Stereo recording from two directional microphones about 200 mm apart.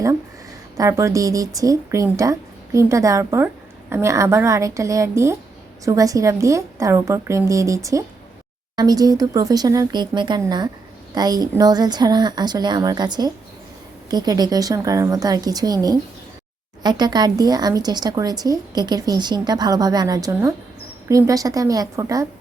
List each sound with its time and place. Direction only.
0.8 s speech: 15° right (ahead or behind)